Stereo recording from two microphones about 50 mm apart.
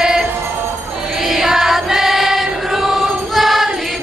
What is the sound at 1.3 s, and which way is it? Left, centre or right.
Choir, centre.